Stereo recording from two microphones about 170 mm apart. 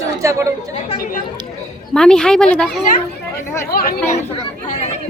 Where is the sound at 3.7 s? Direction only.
60° left (ahead or behind).